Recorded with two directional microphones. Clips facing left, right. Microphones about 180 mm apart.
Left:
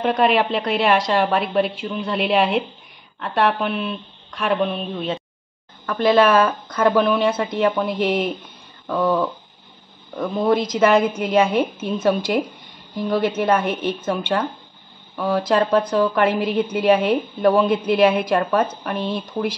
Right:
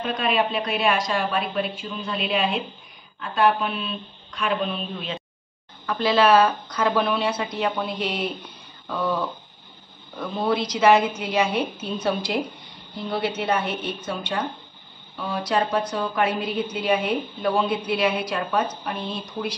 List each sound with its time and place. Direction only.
0.0 s a woman's voice: 65° left (ahead or behind); by 8.3 s 50° left (ahead or behind)
8.8 s dog: 45° left (ahead or behind)
10.1 s a woman's voice: 50° left (ahead or behind)